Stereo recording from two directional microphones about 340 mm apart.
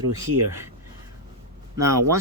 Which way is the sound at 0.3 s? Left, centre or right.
Right.